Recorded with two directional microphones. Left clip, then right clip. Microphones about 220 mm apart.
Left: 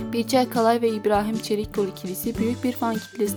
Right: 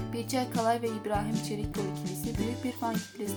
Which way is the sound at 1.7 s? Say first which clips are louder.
Left 9 dB; centre (ahead or behind).